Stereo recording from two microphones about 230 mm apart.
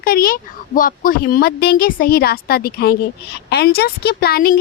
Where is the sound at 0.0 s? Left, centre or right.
Left.